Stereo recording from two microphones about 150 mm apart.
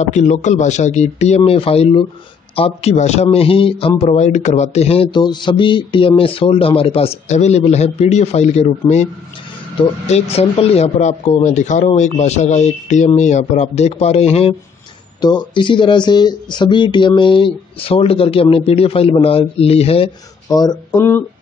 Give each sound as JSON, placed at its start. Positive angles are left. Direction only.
{"t": 0.0, "sound": "speech", "side_deg": 50}
{"t": 4.0, "sound": "speech", "side_deg": 50}
{"t": 15.1, "sound": "speech", "side_deg": 30}
{"t": 20.4, "sound": "speech", "side_deg": 25}
{"t": 20.9, "sound": "speech", "side_deg": 15}